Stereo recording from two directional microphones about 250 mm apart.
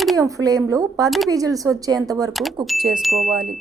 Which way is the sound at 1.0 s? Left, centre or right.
Centre.